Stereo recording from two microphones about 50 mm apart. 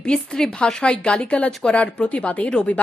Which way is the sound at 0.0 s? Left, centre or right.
Centre.